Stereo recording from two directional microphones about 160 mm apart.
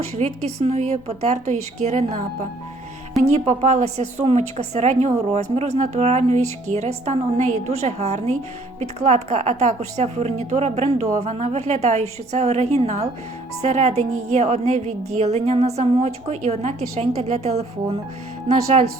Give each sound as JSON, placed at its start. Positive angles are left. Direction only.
{"t": 0.2, "sound": "a woman's voice", "side_deg": -45}